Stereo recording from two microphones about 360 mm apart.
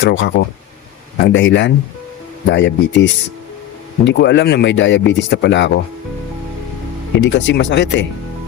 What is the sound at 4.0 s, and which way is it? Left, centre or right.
Speech, left.